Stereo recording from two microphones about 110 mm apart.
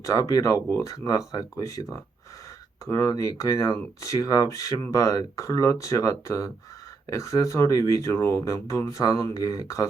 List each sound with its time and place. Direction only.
0.0 s speech: 30° left (ahead or behind)